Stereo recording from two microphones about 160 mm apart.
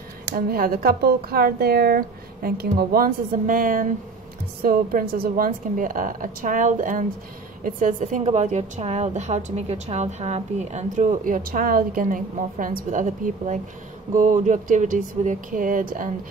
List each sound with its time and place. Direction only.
0.3 s a woman's voice: 65° right (ahead or behind)